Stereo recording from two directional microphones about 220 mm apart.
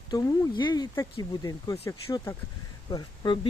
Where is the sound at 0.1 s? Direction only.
20° left (ahead or behind).